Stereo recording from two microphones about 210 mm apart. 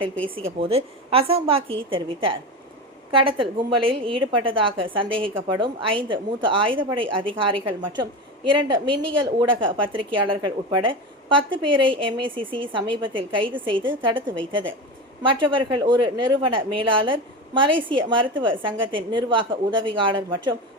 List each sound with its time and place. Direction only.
0.6 s speech: 25° right (ahead or behind)